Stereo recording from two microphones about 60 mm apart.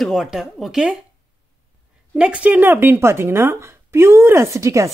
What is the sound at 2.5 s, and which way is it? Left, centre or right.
Speech, right.